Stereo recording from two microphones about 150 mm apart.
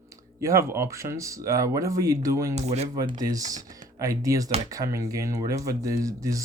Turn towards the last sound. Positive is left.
turn(degrees=-20)  # may be behind; listen again after turning